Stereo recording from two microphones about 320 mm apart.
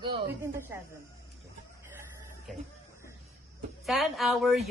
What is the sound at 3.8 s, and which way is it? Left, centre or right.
Speech, centre.